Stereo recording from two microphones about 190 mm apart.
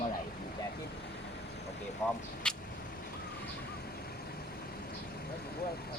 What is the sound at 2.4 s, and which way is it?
Vehicle, 5° left (ahead or behind).